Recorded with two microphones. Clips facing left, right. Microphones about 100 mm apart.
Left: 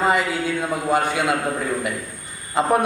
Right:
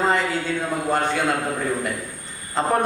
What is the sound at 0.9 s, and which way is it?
Speech, 5° left (ahead or behind).